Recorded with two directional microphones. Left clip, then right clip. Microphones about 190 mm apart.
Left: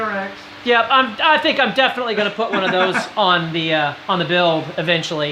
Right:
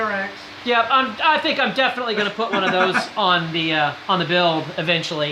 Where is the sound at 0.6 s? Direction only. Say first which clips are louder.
Left 3 dB; 30° left (ahead or behind).